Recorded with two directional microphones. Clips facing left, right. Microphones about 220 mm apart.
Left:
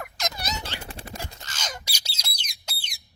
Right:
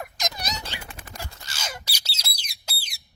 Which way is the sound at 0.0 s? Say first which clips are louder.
Even; 15° right (ahead or behind).